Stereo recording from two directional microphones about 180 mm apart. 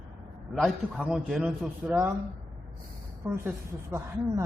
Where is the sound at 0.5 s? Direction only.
5° right (ahead or behind).